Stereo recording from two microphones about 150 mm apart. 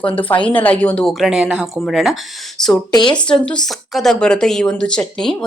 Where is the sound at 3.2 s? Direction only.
5° left (ahead or behind).